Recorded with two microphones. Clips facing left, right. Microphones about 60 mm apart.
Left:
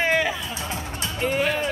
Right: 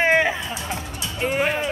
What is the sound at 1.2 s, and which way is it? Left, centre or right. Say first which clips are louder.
Music: right 1 dB; right.